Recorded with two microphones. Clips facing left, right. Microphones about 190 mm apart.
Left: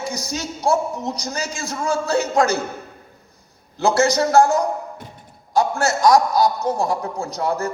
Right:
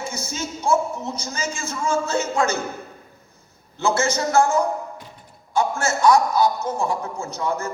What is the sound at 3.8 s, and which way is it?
A man's voice, 35° left (ahead or behind).